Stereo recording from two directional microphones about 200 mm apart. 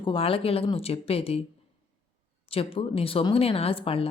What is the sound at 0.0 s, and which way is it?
Speech, 25° left (ahead or behind).